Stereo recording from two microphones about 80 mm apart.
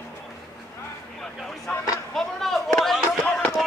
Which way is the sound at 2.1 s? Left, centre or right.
Centre.